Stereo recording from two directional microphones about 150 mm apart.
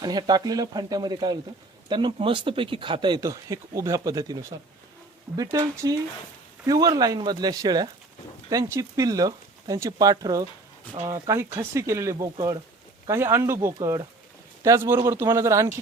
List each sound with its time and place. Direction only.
0.0 s a man's voice: 25° right (ahead or behind)